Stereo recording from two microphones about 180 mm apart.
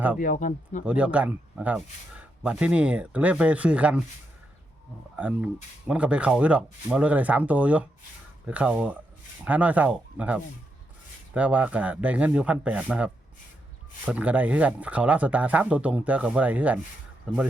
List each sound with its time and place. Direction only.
0.2 s speech: 45° left (ahead or behind)
0.9 s speech: 5° right (ahead or behind)
5.1 s speech: 10° right (ahead or behind)